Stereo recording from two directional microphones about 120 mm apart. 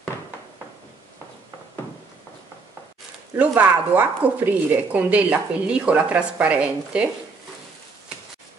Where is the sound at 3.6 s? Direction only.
15° right (ahead or behind).